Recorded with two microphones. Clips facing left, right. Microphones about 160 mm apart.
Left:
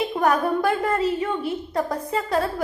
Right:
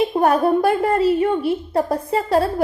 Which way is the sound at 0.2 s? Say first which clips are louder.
Right 4 dB; 30° right (ahead or behind).